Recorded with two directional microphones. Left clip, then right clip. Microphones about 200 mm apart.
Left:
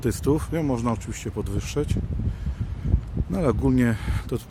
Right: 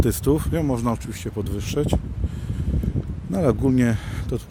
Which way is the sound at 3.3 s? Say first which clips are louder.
Right 2 dB; 10° right (ahead or behind).